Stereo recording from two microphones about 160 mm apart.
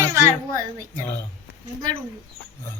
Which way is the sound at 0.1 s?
15° right (ahead or behind).